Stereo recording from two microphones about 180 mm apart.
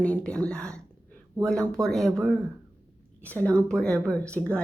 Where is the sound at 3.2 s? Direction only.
10° left (ahead or behind).